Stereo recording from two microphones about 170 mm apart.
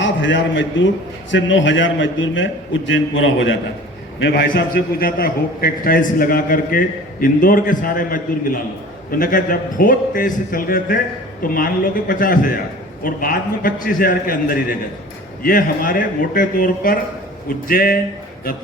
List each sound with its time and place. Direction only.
0.0 s a man's voice: 90° left; by 18.0 s 60° left (ahead or behind)